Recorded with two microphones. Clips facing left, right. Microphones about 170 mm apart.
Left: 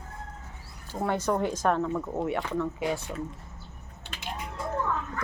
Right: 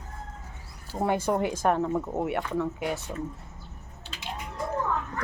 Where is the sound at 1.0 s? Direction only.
10° right (ahead or behind).